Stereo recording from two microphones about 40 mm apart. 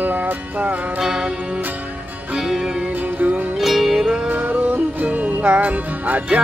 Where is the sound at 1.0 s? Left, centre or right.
Centre.